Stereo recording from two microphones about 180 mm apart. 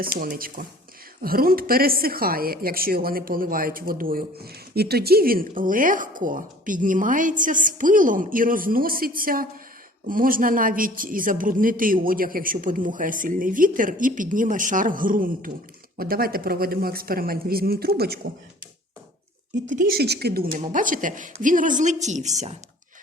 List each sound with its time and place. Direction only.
0.0 s a woman's voice: 55° right (ahead or behind)
19.7 s a woman's voice: 55° right (ahead or behind); by 22.5 s 40° right (ahead or behind)